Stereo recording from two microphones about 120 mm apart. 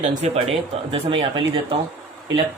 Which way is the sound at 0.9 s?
50° right (ahead or behind).